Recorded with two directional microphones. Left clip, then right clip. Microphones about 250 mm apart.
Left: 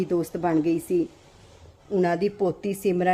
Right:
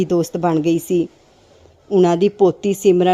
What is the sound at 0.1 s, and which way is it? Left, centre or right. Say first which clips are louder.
A woman's voice: right 7 dB; right.